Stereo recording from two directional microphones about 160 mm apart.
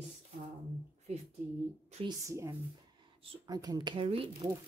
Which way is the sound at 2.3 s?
20° right (ahead or behind).